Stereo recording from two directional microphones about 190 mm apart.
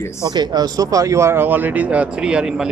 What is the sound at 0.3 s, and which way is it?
Speech, 20° right (ahead or behind).